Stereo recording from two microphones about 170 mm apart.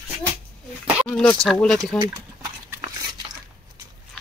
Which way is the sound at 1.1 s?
5° left (ahead or behind).